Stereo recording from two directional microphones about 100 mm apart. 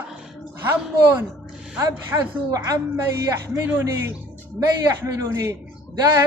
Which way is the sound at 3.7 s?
15° right (ahead or behind).